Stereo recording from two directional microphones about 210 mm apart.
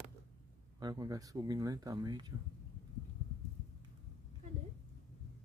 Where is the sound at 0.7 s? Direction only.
20° right (ahead or behind).